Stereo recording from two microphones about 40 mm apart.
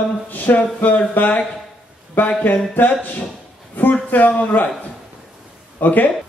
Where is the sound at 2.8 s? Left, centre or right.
Left.